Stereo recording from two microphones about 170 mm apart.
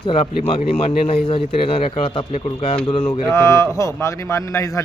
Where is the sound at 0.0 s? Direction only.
35° left (ahead or behind).